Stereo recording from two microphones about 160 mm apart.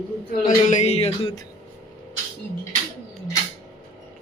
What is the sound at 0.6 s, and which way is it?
Speech, 45° left (ahead or behind).